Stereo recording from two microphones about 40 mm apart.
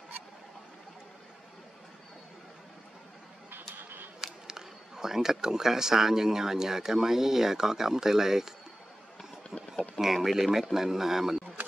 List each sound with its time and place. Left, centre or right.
3.7 s a sound: right
4.2 s speech: centre
9.9 s speech: centre